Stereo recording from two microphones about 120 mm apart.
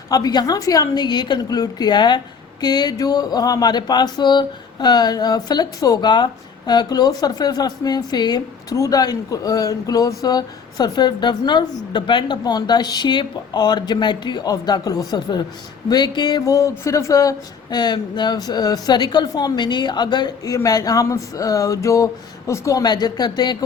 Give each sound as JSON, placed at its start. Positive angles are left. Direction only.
{"t": 0.1, "sound": "speech", "side_deg": 35}
{"t": 16.6, "sound": "speech", "side_deg": 25}